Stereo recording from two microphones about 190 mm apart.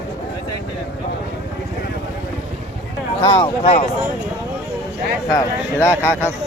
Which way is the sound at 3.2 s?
25° left (ahead or behind).